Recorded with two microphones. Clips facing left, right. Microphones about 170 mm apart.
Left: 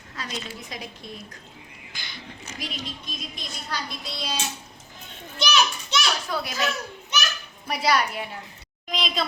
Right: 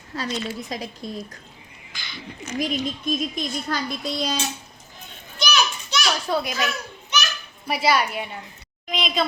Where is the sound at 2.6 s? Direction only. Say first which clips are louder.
Right 11 dB; 50° right (ahead or behind).